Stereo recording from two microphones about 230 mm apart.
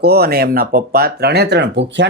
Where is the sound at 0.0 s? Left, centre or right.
Right.